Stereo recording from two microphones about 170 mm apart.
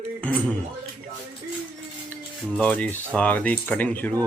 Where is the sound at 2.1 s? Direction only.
10° left (ahead or behind).